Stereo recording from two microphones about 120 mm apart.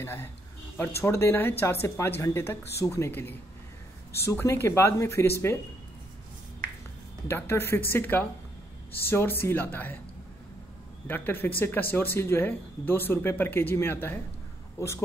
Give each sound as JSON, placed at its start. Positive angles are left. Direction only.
{"t": 0.0, "sound": "speech", "side_deg": 20}
{"t": 7.2, "sound": "speech", "side_deg": 20}
{"t": 11.1, "sound": "speech", "side_deg": 15}